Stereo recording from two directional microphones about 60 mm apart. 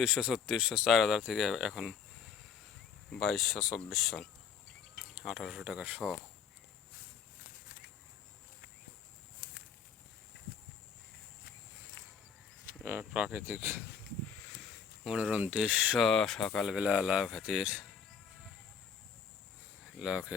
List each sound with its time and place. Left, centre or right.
0.0 s speech: centre
3.1 s speech: centre
5.7 s speech: right
13.0 s speech: right
13.5 s speech: right
15.0 s speech: centre
15.3 s speech: right
16.0 s speech: centre
16.6 s speech: centre
20.0 s speech: centre